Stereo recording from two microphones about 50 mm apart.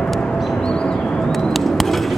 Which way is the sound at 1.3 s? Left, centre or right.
Centre.